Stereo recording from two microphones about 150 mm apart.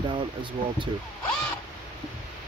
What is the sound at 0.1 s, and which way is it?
Speech, 35° right (ahead or behind).